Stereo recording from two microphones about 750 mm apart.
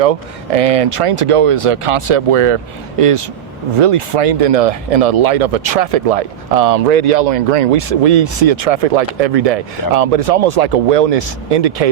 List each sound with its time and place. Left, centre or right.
0.0 s speech: right